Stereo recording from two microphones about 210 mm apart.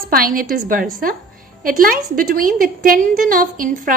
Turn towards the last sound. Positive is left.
turn(degrees=-40)  # may be behind; listen again after turning